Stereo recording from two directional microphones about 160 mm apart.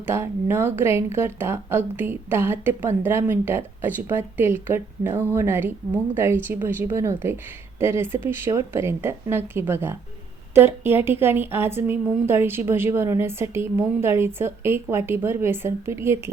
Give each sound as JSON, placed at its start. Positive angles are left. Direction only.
{"t": 0.0, "sound": "a woman's voice", "side_deg": -15}